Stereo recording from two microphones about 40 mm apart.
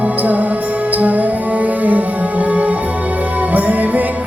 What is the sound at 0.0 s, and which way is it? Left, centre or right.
Music, right.